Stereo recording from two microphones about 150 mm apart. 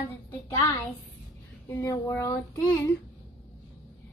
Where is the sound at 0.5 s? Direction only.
25° left (ahead or behind).